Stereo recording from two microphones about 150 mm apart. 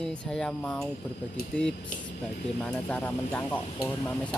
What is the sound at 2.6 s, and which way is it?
Speech, 10° left (ahead or behind).